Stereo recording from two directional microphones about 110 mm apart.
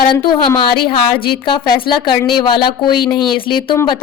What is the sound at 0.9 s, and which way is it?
A woman's voice, 50° left (ahead or behind).